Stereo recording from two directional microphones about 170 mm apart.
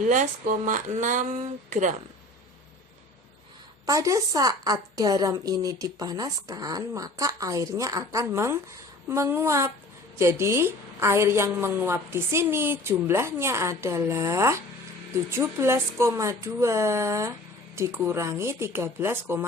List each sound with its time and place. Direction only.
0.1 s speech: 50° right (ahead or behind)
3.8 s a woman's voice: 20° right (ahead or behind)